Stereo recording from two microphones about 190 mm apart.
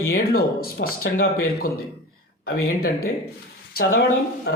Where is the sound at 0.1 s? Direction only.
55° left (ahead or behind).